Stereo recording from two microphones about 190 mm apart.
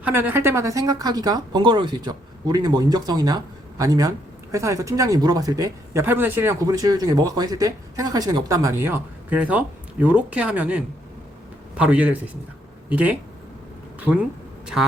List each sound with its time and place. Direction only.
0.0 s speech: 10° right (ahead or behind)